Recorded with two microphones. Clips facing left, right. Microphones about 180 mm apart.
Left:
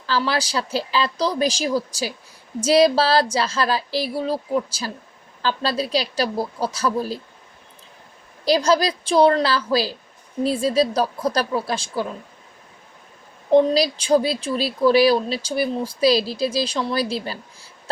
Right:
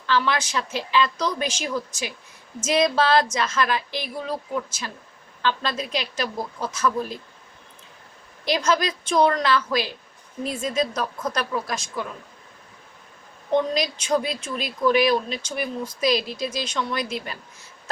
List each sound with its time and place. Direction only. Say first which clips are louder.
0.0 s a woman's voice: left 1 dB; 35° left (ahead or behind)
8.4 s a woman's voice: left 5 dB; 35° left (ahead or behind)
13.5 s a woman's voice: left 6 dB; 35° left (ahead or behind)